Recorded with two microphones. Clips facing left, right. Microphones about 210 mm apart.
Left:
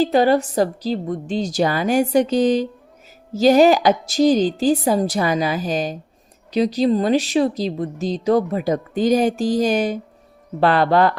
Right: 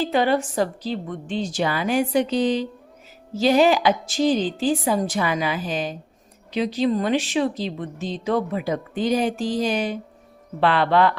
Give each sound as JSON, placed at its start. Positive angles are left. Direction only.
{"t": 0.0, "sound": "speech", "side_deg": 40}